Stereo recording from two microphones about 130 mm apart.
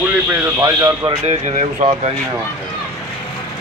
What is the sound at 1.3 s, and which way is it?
Speech, 65° right (ahead or behind).